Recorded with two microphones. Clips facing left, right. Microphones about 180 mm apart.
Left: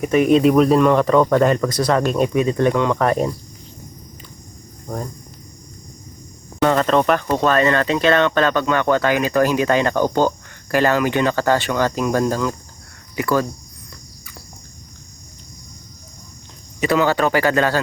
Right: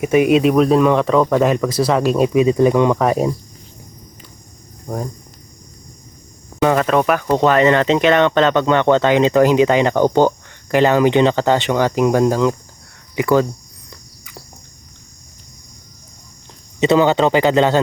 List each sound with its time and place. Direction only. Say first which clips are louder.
0.0 s speech: right 1 dB; 10° right (ahead or behind)
4.9 s speech: right 3 dB; 15° right (ahead or behind)
6.6 s speech: right 1 dB; 10° right (ahead or behind)
7.3 s speech: right 4 dB; 15° right (ahead or behind)
16.8 s speech: right 4 dB; 25° right (ahead or behind)